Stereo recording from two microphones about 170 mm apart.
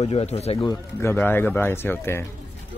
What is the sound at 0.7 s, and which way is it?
Speech, 15° left (ahead or behind).